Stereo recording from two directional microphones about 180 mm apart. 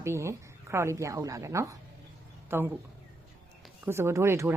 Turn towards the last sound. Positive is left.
turn(degrees=-15)  # may be behind; listen again after turning